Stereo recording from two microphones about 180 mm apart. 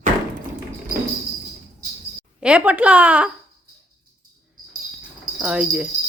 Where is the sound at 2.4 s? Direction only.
5° right (ahead or behind).